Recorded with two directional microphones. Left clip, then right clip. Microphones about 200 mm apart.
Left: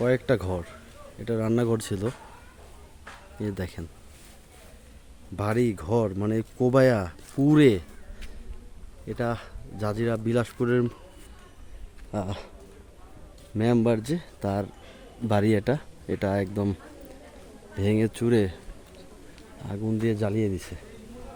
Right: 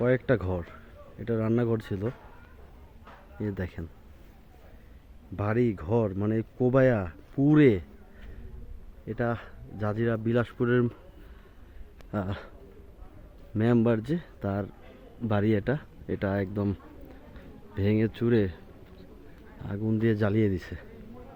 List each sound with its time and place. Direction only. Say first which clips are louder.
0.0 s speech: left 1 dB; 5° left (ahead or behind)
3.4 s speech: left 2 dB; 10° left (ahead or behind)
5.4 s speech: left 2 dB; 10° left (ahead or behind)
12.1 s speech: left 2 dB; 10° left (ahead or behind)
13.6 s speech: left 2 dB; 10° left (ahead or behind)
17.7 s speech: left 2 dB; 15° left (ahead or behind)
19.6 s speech: even; 10° left (ahead or behind)